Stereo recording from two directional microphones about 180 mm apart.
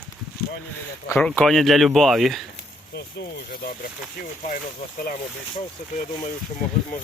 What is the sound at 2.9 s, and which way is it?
Speech, 60° left (ahead or behind).